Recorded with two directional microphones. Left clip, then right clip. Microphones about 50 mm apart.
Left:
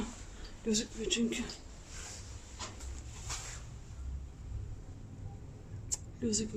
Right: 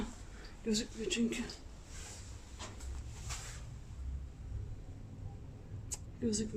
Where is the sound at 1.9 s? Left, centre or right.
Left.